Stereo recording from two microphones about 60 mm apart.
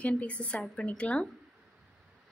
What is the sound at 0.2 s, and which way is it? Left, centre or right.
A woman's voice, left.